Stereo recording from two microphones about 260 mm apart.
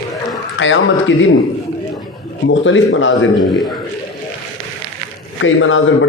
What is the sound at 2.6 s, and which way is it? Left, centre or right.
Speech, left.